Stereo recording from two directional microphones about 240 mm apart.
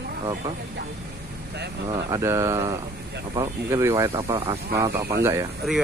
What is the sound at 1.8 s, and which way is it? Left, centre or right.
Speech, centre.